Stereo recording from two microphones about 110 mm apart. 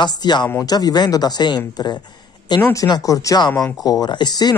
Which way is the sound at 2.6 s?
30° left (ahead or behind).